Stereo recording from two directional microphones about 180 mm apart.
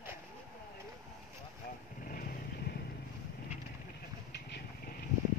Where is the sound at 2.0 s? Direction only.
50° left (ahead or behind).